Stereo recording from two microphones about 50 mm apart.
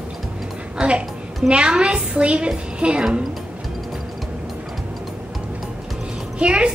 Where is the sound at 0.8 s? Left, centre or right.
Right.